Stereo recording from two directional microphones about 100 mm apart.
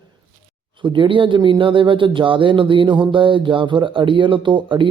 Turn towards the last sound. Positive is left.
turn(degrees=-55)  # may be behind; listen again after turning